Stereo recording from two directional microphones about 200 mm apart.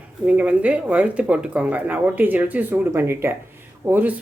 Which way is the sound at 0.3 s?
5° right (ahead or behind).